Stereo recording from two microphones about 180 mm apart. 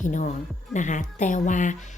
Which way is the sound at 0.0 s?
45° left (ahead or behind).